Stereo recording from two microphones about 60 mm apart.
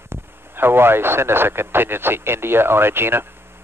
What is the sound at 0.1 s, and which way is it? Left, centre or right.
A man's voice, right.